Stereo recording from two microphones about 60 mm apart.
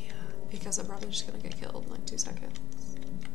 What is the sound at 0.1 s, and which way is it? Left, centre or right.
A woman's voice, centre.